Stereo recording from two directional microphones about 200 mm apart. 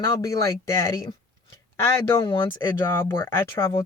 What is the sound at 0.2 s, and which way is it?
Speech, 15° left (ahead or behind).